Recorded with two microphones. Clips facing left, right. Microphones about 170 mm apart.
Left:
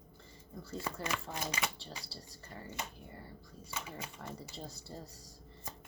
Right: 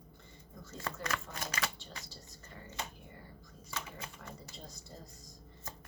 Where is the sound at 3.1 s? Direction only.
30° left (ahead or behind).